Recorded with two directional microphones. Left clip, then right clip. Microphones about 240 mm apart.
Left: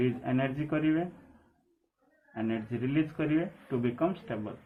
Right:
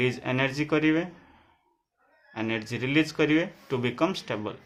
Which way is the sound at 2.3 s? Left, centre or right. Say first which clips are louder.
Right 4 dB; right.